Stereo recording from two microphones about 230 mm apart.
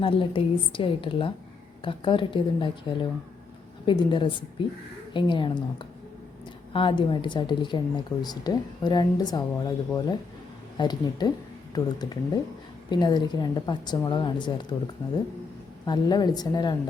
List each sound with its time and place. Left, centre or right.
0.0 s speech: left
3.8 s a woman's voice: centre
15.9 s a woman's voice: centre